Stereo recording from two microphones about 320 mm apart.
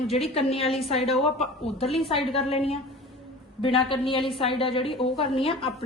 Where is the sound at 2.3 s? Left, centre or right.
Centre.